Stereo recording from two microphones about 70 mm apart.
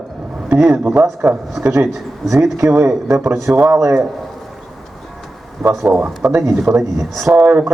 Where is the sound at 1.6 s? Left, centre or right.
Right.